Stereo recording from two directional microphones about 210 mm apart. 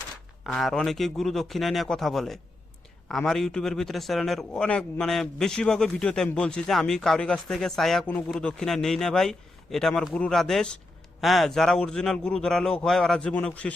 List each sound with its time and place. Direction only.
0.4 s a man's voice: centre (ahead or behind)